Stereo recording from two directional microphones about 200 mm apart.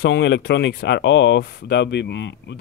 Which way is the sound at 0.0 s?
60° left (ahead or behind).